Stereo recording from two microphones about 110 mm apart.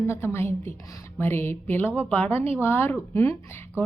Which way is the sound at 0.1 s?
25° left (ahead or behind).